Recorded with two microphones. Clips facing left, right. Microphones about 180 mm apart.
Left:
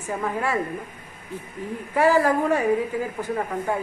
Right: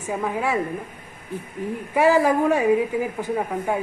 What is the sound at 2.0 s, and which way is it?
A woman's voice, 15° right (ahead or behind).